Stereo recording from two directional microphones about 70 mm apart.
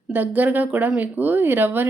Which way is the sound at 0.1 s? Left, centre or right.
Right.